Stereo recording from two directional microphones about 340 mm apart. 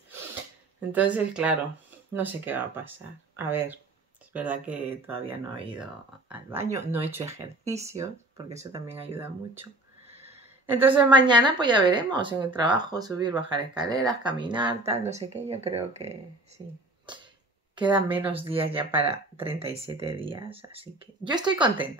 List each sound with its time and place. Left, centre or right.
0.7 s a woman's voice: centre
10.2 s a woman's voice: centre
17.1 s a sound: centre
17.7 s a woman's voice: centre